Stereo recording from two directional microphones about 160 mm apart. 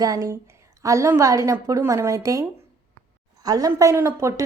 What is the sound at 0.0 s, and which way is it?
A woman's voice, 20° right (ahead or behind).